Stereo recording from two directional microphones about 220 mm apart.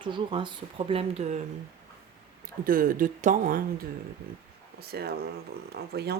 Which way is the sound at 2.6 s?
40° right (ahead or behind).